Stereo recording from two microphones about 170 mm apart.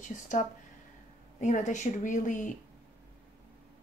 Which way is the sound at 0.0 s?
45° left (ahead or behind).